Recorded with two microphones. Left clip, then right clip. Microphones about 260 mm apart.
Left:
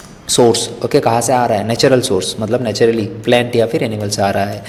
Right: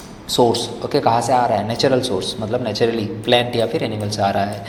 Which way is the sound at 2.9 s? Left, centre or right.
Left.